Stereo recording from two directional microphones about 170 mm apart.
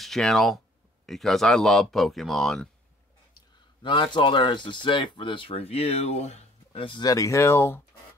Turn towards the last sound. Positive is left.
turn(degrees=15)  # may be behind; listen again after turning